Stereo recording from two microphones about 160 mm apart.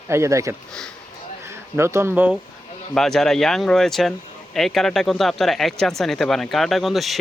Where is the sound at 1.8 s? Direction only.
15° right (ahead or behind).